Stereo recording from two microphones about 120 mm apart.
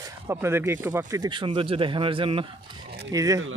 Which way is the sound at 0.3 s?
20° right (ahead or behind).